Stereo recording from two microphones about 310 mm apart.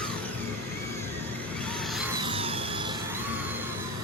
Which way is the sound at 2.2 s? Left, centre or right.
Centre.